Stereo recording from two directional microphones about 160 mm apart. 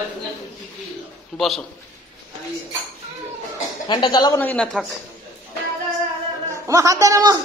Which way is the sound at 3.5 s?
30° left (ahead or behind).